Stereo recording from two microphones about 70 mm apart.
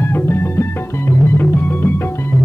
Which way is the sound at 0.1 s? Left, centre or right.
Left.